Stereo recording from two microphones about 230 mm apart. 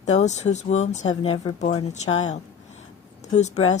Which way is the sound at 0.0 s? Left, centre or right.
Left.